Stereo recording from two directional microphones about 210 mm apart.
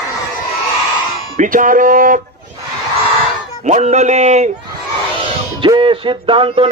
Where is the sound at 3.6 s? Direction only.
35° right (ahead or behind).